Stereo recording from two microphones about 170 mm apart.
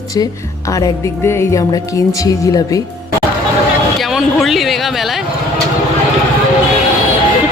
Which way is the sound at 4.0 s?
Centre (ahead or behind).